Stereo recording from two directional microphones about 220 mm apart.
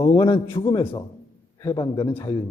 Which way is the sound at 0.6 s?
25° left (ahead or behind).